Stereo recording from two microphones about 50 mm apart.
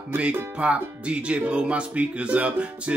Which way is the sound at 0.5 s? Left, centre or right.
Right.